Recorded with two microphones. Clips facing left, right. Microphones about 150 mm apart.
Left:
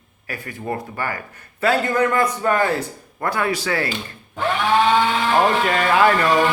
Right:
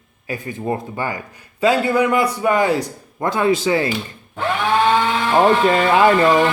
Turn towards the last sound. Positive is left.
turn(degrees=-25)  # may be behind; listen again after turning